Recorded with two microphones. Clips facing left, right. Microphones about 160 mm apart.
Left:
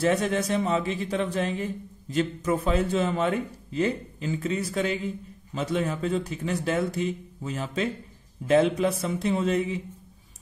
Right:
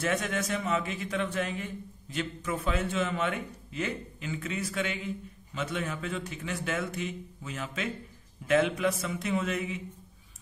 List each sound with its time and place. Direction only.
0.0 s speech: 35° left (ahead or behind)